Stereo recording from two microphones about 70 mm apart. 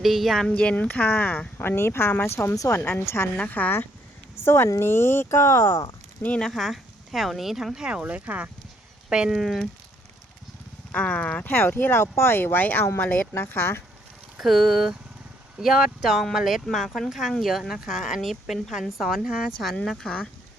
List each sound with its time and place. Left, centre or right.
0.0 s speech: centre
0.4 s speech: centre
1.5 s speech: left
2.6 s speech: left
3.3 s speech: left
4.4 s speech: left
6.2 s speech: centre
6.5 s speech: centre
9.3 s speech: centre
10.9 s speech: left
14.3 s speech: centre
19.2 s speech: centre
19.7 s speech: centre